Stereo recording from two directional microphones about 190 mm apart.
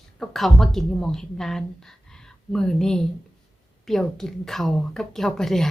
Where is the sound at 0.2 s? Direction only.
Centre (ahead or behind).